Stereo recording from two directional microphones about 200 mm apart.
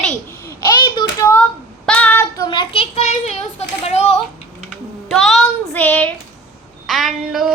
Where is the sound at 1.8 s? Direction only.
5° left (ahead or behind); by 4.2 s 30° left (ahead or behind).